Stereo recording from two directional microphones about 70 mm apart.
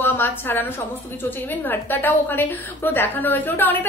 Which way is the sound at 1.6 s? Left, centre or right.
Left.